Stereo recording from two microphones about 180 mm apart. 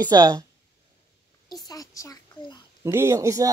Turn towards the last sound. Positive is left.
turn(degrees=-20)  # may be behind; listen again after turning